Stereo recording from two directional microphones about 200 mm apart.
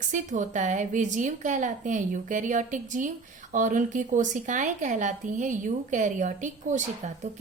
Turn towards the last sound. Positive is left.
turn(degrees=-40)  # may be behind; listen again after turning